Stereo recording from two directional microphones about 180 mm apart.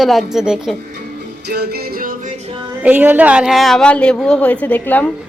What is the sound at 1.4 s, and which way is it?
Music, 65° right (ahead or behind).